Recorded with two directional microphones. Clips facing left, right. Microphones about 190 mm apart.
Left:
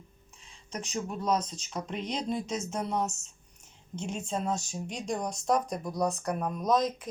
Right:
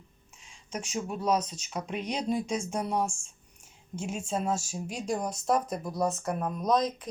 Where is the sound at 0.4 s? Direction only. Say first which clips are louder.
Right 1 dB; 10° right (ahead or behind).